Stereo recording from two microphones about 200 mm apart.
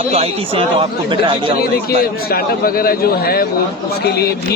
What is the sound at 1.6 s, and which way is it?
Speech, 50° left (ahead or behind).